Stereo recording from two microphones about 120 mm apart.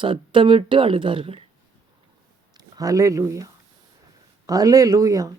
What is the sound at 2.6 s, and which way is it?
Speech, 30° right (ahead or behind).